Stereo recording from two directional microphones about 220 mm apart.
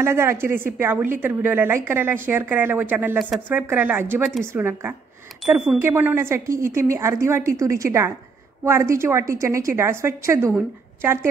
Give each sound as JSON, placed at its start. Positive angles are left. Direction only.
{"t": 0.0, "sound": "a woman's voice", "side_deg": -10}